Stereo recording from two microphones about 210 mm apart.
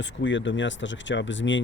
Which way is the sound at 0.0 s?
60° left (ahead or behind).